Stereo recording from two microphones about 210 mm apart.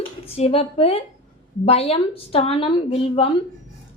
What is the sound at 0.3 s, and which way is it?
A woman's voice, 30° left (ahead or behind).